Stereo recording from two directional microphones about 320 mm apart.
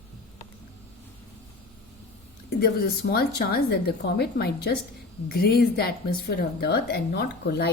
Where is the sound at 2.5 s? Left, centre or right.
Left.